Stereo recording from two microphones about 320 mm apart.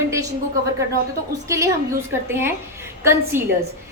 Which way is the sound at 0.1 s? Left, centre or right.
Centre.